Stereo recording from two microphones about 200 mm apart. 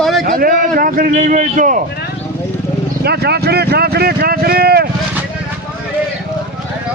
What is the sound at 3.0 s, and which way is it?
Speech, 55° right (ahead or behind).